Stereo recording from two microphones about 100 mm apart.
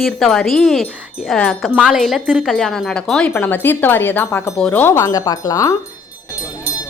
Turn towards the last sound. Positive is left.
turn(degrees=35)  # may be behind; listen again after turning